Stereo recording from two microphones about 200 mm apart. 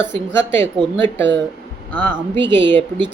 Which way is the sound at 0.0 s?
65° right (ahead or behind).